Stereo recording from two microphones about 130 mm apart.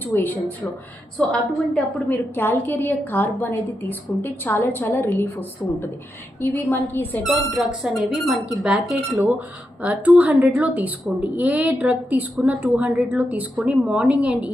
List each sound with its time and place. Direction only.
0.0 s a woman's voice: 15° left (ahead or behind)
7.3 s a woman's voice: centre (ahead or behind)